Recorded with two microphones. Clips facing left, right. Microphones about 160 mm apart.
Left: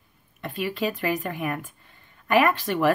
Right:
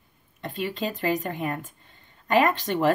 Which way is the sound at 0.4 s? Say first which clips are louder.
Left 2 dB; 20° right (ahead or behind).